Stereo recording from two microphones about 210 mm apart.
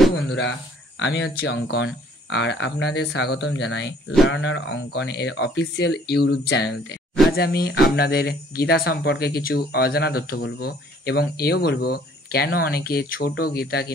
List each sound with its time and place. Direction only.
0.1 s speech: 55° left (ahead or behind)